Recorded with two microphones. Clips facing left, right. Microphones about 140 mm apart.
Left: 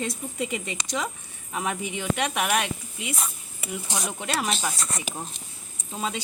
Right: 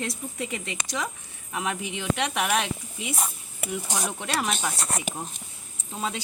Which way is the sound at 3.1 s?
45° right (ahead or behind).